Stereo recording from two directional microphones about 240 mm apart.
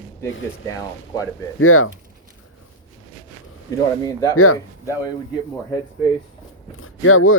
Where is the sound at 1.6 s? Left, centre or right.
Left.